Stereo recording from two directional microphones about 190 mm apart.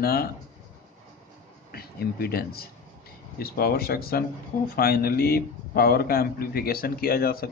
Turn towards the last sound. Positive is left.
turn(degrees=50)  # may be behind; listen again after turning